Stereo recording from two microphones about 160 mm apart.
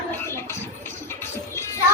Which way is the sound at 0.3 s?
15° left (ahead or behind).